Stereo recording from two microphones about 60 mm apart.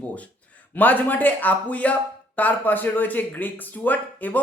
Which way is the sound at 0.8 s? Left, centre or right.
Left.